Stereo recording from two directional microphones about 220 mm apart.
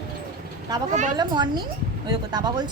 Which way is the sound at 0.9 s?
35° right (ahead or behind).